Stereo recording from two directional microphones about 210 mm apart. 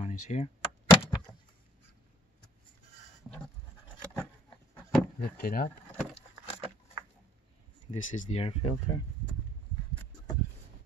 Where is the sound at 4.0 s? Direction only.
5° left (ahead or behind).